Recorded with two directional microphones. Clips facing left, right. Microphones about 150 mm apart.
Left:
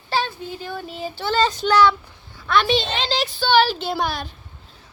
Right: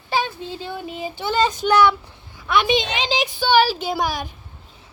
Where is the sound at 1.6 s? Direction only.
20° right (ahead or behind).